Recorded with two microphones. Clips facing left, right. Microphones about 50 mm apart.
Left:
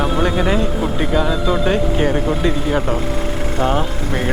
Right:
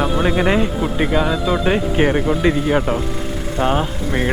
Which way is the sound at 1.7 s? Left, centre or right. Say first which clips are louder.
Right 1 dB; right.